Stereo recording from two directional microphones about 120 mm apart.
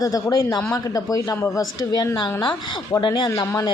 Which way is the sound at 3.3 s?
25° left (ahead or behind).